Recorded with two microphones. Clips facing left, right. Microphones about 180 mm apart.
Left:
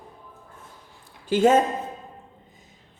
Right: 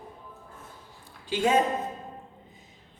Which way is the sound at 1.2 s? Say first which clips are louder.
Left 6 dB; 45° left (ahead or behind).